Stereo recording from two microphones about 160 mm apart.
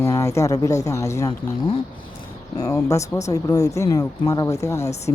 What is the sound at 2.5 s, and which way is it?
Speech, 20° left (ahead or behind).